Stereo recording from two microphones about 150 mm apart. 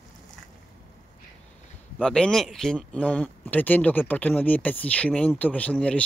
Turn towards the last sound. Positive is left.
turn(degrees=10)  # may be behind; listen again after turning